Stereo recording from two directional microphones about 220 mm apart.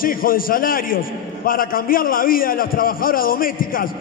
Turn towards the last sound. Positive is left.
turn(degrees=40)  # may be behind; listen again after turning